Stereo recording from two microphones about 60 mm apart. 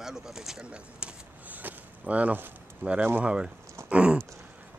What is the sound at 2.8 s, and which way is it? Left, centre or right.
Speech, centre.